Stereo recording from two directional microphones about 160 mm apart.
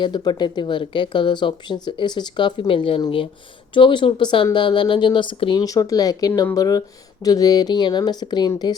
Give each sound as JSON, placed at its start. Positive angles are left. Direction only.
{"t": 0.0, "sound": "speech", "side_deg": 25}